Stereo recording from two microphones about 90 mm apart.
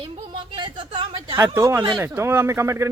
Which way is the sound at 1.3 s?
30° right (ahead or behind).